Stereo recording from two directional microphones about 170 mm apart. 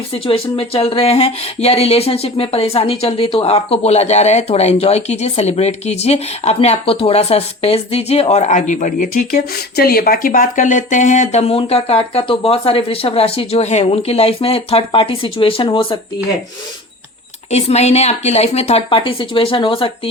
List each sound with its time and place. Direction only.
0.1 s speech: 35° left (ahead or behind)
17.5 s speech: 40° left (ahead or behind)